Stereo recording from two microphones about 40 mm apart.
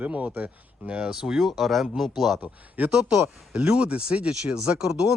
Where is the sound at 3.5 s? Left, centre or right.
Right.